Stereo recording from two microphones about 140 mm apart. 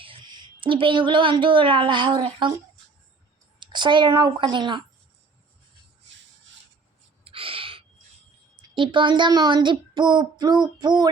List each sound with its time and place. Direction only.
0.0 s a woman's voice: 35° right (ahead or behind)
3.6 s speech: 35° right (ahead or behind)
7.3 s gasp: 40° right (ahead or behind)
8.7 s speech: 35° right (ahead or behind)